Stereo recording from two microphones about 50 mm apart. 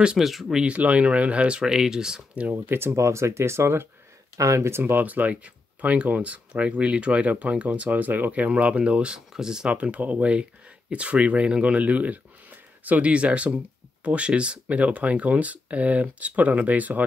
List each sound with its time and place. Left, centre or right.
0.2 s speech: centre
0.5 s speech: centre
1.6 s speech: centre
2.5 s speech: right
3.0 s speech: right
4.4 s speech: right
5.0 s speech: right; by 9.7 s centre
9.7 s speech: right